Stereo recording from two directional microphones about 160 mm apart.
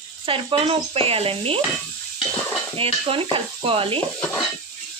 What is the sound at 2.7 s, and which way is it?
Speech, 35° right (ahead or behind).